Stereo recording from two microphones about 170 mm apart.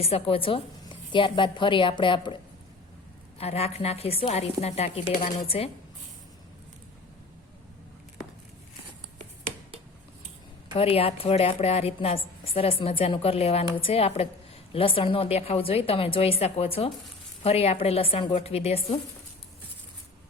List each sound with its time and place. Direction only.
0.0 s a woman's voice: 35° left (ahead or behind)
10.8 s a woman's voice: 35° left (ahead or behind)